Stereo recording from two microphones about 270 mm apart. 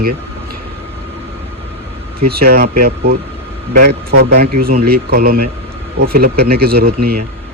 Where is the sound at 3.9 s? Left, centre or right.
Right.